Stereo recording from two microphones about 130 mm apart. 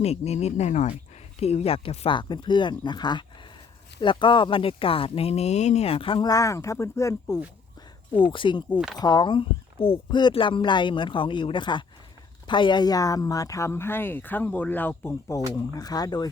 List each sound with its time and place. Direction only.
0.0 s speech: 55° left (ahead or behind)
1.4 s speech: 50° left (ahead or behind)
2.1 s speech: 35° left (ahead or behind)
6.2 s speech: 25° left (ahead or behind)
8.1 s speech: 40° left (ahead or behind); by 15.1 s 15° left (ahead or behind)
15.5 s speech: 30° left (ahead or behind)